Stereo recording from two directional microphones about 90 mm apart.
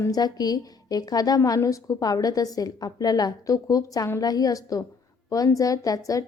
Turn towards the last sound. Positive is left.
turn(degrees=40)  # may be behind; listen again after turning